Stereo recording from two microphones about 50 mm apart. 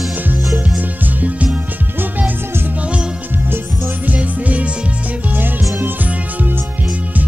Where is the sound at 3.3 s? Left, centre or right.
Right.